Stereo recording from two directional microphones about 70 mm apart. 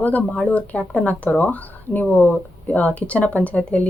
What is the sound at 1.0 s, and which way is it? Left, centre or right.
Speech, left.